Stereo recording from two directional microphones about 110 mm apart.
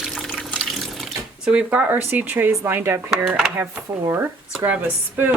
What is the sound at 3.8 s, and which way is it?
Speech, 25° right (ahead or behind).